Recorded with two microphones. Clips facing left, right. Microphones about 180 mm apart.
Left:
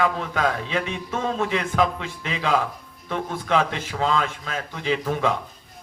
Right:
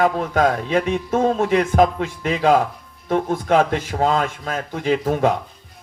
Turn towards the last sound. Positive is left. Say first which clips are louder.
# right 5 dB
turn(degrees=-45)  # may be behind; listen again after turning